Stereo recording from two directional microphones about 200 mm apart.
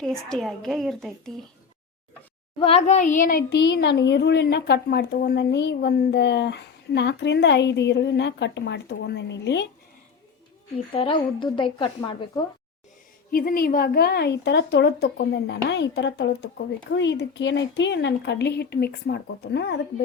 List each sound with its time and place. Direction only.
0.0 s a woman's voice: centre (ahead or behind)
2.6 s speech: 30° left (ahead or behind); by 9.6 s 60° left (ahead or behind)
10.9 s a woman's voice: 25° left (ahead or behind)
13.3 s speech: 45° left (ahead or behind)